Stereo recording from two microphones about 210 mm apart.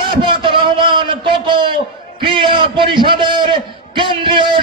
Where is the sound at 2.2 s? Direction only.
20° right (ahead or behind).